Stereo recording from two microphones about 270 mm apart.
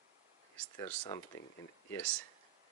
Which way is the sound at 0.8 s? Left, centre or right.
Centre.